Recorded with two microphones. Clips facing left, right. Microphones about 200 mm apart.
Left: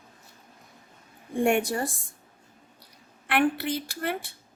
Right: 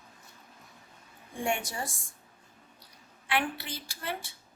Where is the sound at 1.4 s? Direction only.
60° left (ahead or behind).